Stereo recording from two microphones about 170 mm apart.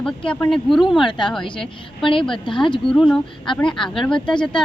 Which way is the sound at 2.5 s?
30° left (ahead or behind).